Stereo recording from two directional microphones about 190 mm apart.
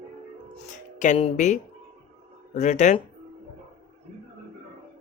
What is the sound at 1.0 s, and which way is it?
Speech, 40° left (ahead or behind).